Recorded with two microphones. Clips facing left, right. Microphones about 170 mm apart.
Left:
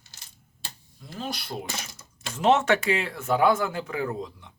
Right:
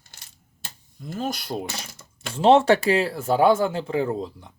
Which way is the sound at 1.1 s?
45° right (ahead or behind).